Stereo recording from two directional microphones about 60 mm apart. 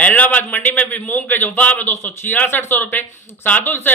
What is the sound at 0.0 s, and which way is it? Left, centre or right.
A man's voice, left.